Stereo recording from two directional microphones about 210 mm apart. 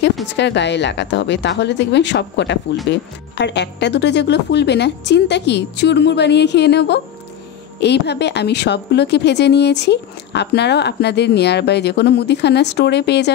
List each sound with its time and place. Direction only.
0.4 s speech: 55° left (ahead or behind)